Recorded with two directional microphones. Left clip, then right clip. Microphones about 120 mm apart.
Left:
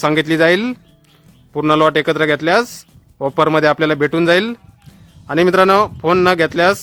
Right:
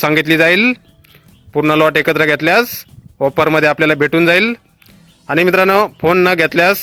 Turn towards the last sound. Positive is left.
turn(degrees=-20)  # may be behind; listen again after turning